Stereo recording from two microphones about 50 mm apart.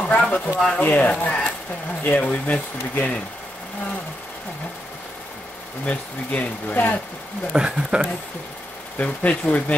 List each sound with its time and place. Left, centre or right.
0.0 s a sound: left
0.7 s speech: left
2.0 s speech: left
5.9 s speech: left
7.5 s speech: centre
8.9 s speech: left